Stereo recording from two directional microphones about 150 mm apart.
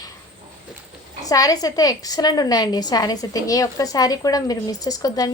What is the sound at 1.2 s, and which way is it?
A woman's voice, 25° left (ahead or behind).